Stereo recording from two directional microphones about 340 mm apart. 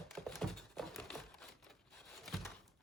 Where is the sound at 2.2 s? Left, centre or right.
Centre.